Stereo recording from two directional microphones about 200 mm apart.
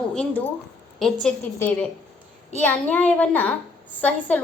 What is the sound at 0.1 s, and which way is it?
A woman's voice, 5° left (ahead or behind).